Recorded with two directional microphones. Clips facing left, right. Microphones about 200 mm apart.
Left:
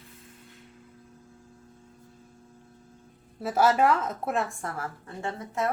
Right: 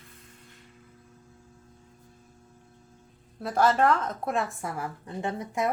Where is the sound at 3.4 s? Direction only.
5° left (ahead or behind).